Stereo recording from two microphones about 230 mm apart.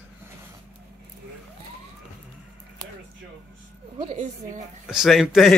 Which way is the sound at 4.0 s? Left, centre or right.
Right.